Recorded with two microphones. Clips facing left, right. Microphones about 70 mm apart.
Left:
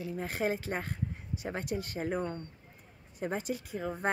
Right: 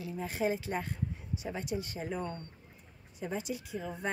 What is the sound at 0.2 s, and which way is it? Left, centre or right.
A woman's voice, left.